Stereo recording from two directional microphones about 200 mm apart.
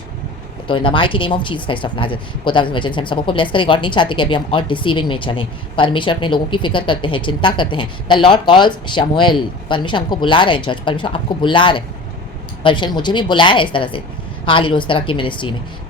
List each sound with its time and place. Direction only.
0.7 s speech: 25° left (ahead or behind)